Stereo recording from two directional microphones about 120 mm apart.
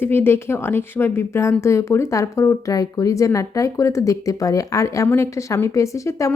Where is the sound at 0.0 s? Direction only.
20° left (ahead or behind).